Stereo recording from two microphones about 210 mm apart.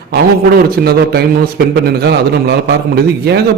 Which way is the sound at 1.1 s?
50° right (ahead or behind).